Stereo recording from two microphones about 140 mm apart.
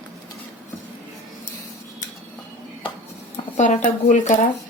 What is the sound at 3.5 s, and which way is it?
Speech, 60° left (ahead or behind).